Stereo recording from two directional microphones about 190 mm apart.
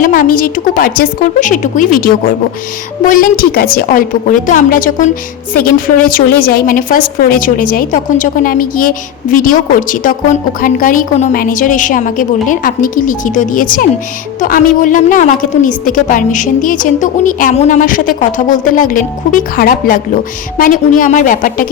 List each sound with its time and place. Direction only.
0.0 s a woman's voice: 45° left (ahead or behind)